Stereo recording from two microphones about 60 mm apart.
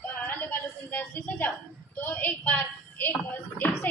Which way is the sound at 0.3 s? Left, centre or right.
Left.